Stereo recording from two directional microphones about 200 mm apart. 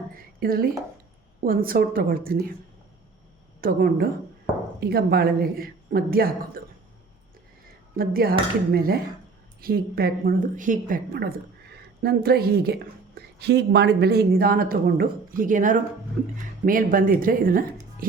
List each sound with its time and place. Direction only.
0.1 s a sound: 45° right (ahead or behind)
1.5 s a woman's voice: 45° right (ahead or behind)
3.6 s a woman's voice: 45° right (ahead or behind)
7.9 s a woman's voice: 50° right (ahead or behind)